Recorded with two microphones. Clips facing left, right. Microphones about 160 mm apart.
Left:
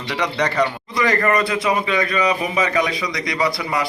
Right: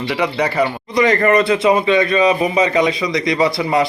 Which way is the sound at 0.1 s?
10° right (ahead or behind).